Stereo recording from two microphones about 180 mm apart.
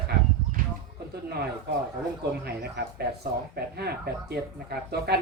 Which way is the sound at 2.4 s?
65° right (ahead or behind).